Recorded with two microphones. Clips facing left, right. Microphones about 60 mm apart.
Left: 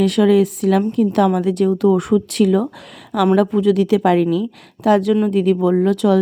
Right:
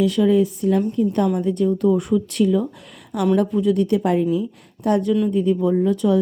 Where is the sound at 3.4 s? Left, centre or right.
Left.